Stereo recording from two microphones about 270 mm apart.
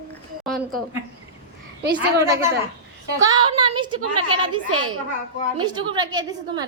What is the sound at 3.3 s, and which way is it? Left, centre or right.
A woman's voice, centre.